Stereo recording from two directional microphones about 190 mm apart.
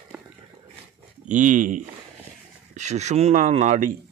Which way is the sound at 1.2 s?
40° right (ahead or behind).